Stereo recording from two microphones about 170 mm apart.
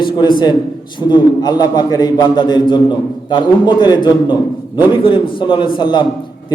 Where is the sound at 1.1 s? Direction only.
25° left (ahead or behind).